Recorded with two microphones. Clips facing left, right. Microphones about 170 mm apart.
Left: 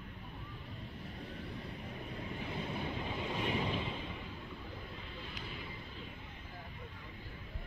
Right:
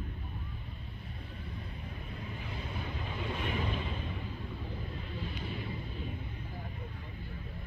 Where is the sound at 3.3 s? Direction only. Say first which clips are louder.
Even; 20° left (ahead or behind).